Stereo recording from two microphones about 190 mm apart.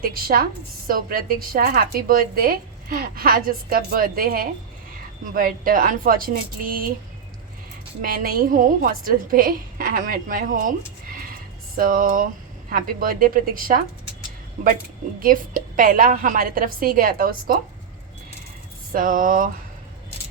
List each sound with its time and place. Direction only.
0.0 s a woman's voice: 50° right (ahead or behind)
8.0 s a woman's voice: 50° right (ahead or behind)
15.2 s a woman's voice: 45° right (ahead or behind)
18.9 s a woman's voice: 45° right (ahead or behind)